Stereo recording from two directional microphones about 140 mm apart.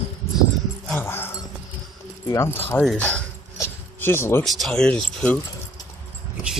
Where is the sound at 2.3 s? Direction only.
20° left (ahead or behind).